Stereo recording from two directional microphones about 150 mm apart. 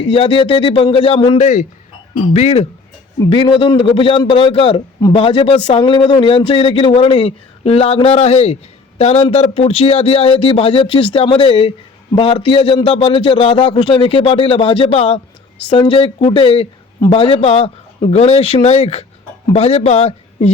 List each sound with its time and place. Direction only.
0.0 s a man's voice: 35° left (ahead or behind)
1.4 s a man's voice: 55° left (ahead or behind)
3.2 s a man's voice: 35° left (ahead or behind)